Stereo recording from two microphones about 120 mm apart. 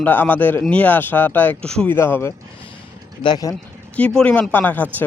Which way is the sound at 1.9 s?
20° left (ahead or behind).